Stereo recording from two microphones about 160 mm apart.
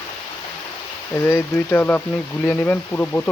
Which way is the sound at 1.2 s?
15° left (ahead or behind).